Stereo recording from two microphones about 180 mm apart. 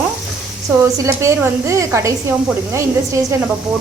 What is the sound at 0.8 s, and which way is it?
Speech, 15° right (ahead or behind).